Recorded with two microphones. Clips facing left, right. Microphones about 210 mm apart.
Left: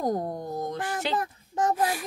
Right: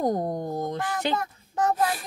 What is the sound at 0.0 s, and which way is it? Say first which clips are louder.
Speech: right 3 dB; 20° right (ahead or behind).